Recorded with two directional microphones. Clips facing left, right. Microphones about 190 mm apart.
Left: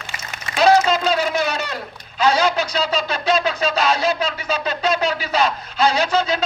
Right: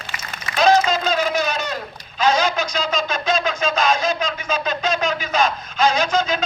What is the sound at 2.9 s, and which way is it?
Speech, 35° left (ahead or behind).